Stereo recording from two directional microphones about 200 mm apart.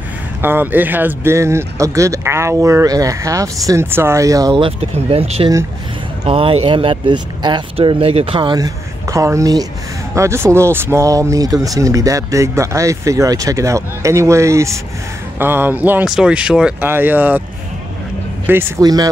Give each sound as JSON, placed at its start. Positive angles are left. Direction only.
{"t": 0.4, "sound": "speech", "side_deg": -10}
{"t": 18.5, "sound": "speech", "side_deg": -15}